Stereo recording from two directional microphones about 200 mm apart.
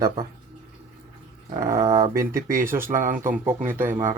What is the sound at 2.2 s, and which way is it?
Speech, 45° right (ahead or behind).